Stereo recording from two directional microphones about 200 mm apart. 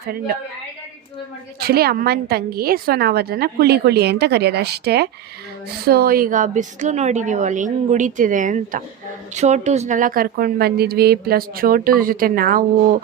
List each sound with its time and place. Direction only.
1.5 s a woman's voice: 50° right (ahead or behind)